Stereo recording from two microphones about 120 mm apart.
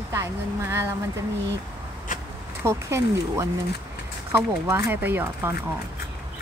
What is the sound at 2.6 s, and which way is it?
Speech, 20° right (ahead or behind).